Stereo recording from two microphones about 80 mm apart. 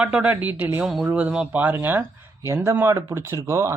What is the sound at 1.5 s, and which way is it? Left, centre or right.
Speech, right.